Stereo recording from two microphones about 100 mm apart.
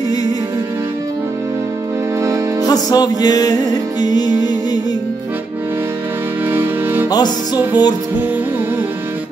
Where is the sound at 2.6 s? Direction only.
40° left (ahead or behind).